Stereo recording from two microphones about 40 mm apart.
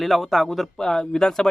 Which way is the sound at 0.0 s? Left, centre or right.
Centre.